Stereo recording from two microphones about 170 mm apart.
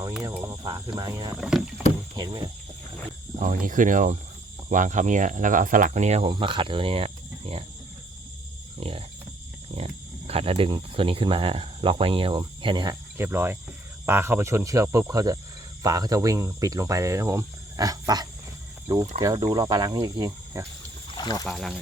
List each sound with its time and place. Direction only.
0.2 s cricket: 15° right (ahead or behind)
0.9 s speech: 25° right (ahead or behind)
1.4 s speech: 5° right (ahead or behind)
2.1 s speech: 25° right (ahead or behind)
3.4 s speech: 50° right (ahead or behind)
6.3 s speech: 30° right (ahead or behind)
8.8 s cricket: 35° right (ahead or behind)
9.7 s speech: 35° right (ahead or behind); by 13.6 s 15° right (ahead or behind)
14.0 s cricket: 15° right (ahead or behind)
15.8 s speech: 20° right (ahead or behind)
21.1 s a sound: 25° left (ahead or behind)
21.4 s speech: centre (ahead or behind)